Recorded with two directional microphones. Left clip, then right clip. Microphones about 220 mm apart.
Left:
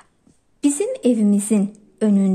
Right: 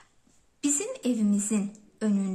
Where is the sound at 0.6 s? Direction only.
25° left (ahead or behind).